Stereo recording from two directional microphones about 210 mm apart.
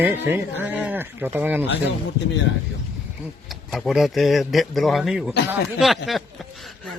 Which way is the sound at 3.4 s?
Centre (ahead or behind).